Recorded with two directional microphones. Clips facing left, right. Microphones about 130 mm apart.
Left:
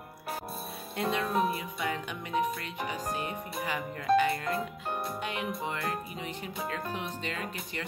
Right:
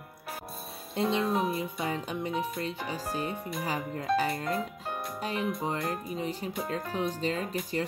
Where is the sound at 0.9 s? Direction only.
25° right (ahead or behind).